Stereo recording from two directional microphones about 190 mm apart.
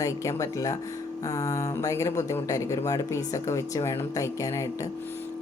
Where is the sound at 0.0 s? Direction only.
15° left (ahead or behind).